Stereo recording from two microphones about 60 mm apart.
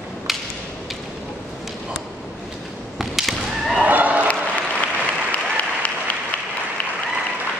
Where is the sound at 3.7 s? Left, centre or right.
Right.